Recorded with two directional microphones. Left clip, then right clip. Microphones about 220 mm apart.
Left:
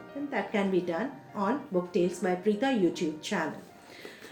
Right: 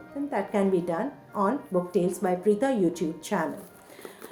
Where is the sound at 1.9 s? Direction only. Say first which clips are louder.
Right 2 dB; 40° right (ahead or behind).